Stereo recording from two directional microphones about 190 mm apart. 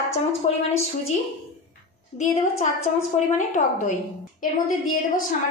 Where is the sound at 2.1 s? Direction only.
35° left (ahead or behind).